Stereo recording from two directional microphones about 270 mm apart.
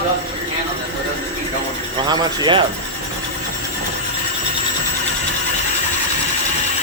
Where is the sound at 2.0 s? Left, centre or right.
Centre.